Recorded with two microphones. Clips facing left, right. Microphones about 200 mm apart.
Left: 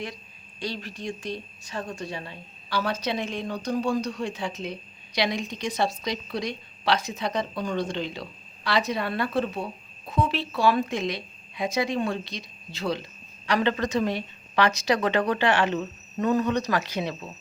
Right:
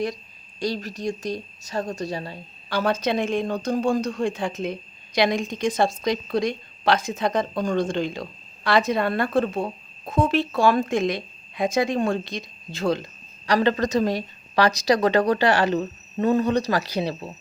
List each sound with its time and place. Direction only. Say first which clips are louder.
0.6 s a woman's voice: right 6 dB; 40° right (ahead or behind)
2.6 s a woman's voice: right 5 dB; 50° right (ahead or behind); by 17.2 s 35° right (ahead or behind)